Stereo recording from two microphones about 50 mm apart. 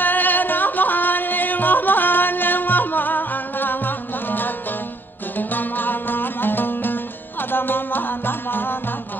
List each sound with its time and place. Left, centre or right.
0.0 s music: left